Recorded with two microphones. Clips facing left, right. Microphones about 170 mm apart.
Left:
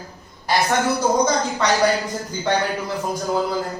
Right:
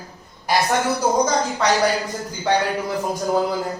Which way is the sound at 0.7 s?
Centre (ahead or behind).